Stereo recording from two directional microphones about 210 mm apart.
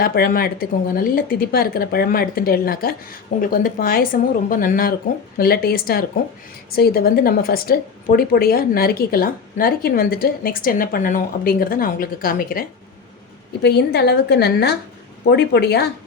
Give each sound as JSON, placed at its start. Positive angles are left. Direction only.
{"t": 0.0, "sound": "a woman's voice", "side_deg": 45}